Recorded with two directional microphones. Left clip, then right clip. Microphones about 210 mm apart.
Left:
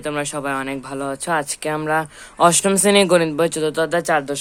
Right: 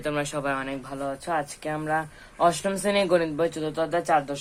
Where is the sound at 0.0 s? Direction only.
25° left (ahead or behind).